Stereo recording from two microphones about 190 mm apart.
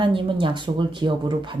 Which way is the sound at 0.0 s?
25° right (ahead or behind).